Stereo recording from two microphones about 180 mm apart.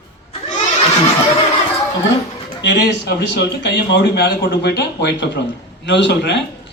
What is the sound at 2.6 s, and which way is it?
A man's voice, 75° left (ahead or behind).